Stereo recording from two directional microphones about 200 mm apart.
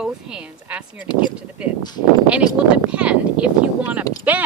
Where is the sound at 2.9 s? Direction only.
5° right (ahead or behind).